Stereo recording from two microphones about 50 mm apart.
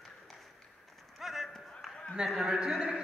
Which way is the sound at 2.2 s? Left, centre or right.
Centre.